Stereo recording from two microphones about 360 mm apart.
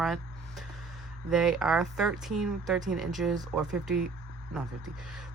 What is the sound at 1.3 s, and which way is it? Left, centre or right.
Speech, centre.